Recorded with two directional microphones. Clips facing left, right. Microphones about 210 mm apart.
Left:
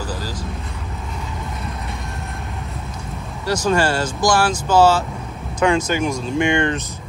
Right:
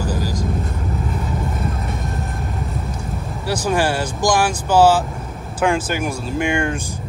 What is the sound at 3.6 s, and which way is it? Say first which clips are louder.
Speech: left 1 dB; 10° right (ahead or behind).